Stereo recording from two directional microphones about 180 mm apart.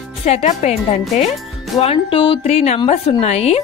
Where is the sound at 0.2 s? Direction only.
40° left (ahead or behind).